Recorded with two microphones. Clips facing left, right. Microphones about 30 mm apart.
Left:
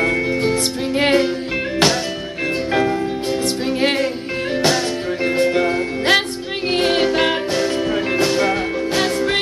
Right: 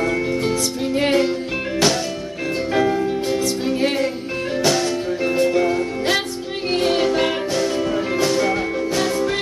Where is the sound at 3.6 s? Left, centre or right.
Left.